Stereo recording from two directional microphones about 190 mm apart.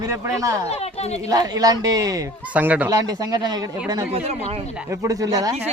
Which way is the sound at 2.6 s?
10° right (ahead or behind).